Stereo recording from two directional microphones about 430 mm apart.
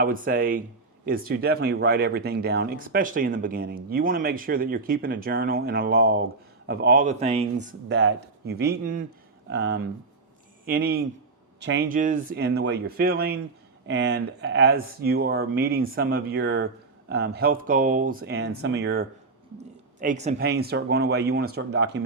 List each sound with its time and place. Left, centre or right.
0.0 s speech: centre
7.9 s speech: right